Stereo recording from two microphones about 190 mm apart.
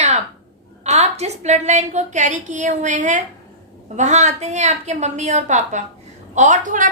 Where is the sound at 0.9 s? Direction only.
35° right (ahead or behind).